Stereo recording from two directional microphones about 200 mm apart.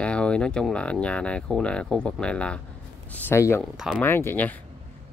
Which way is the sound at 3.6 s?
5° right (ahead or behind).